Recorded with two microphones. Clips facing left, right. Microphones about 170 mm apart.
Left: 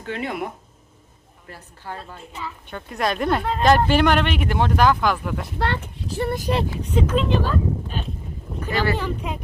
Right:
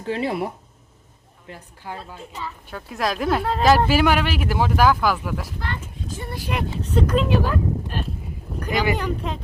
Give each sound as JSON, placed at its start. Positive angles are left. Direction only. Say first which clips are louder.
{"t": 0.0, "sound": "speech", "louder": "right 3 dB", "side_deg": -30}
{"t": 1.5, "sound": "speech", "louder": "even", "side_deg": -15}
{"t": 2.0, "sound": "a woman's voice", "louder": "right 1 dB", "side_deg": 0}
{"t": 5.5, "sound": "speech", "louder": "left 6 dB", "side_deg": 70}
{"t": 6.9, "sound": "a woman's voice", "louder": "right 1 dB", "side_deg": 5}
{"t": 7.3, "sound": "speech", "louder": "even", "side_deg": -10}
{"t": 8.7, "sound": "speech", "louder": "right 1 dB", "side_deg": -15}
{"t": 9.0, "sound": "a woman's voice", "louder": "right 1 dB", "side_deg": 5}